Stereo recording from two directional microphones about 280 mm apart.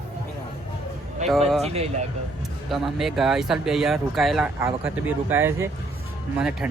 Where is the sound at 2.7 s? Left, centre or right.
Centre.